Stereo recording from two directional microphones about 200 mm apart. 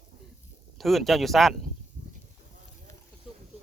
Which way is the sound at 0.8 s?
Centre (ahead or behind).